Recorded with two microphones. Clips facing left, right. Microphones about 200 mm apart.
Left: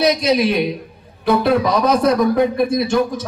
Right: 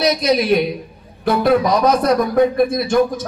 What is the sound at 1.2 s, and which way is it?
Speech, 45° right (ahead or behind).